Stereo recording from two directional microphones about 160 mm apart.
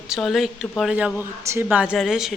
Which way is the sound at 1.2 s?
15° right (ahead or behind).